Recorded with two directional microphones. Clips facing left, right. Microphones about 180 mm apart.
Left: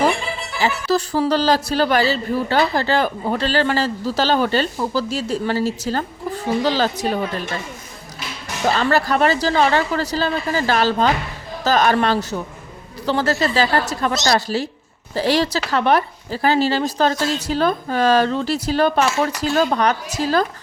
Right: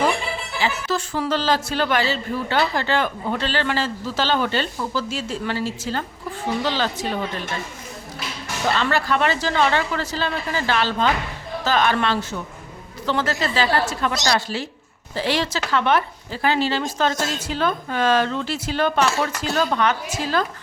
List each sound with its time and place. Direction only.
0.6 s a man's voice: 35° left (ahead or behind)
8.7 s a man's voice: 40° left (ahead or behind)